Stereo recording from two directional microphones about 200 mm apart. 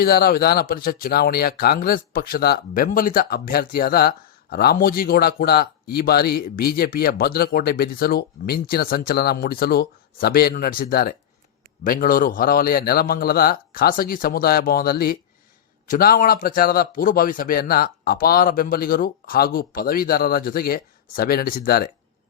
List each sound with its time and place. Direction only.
0.0 s speech: 50° left (ahead or behind)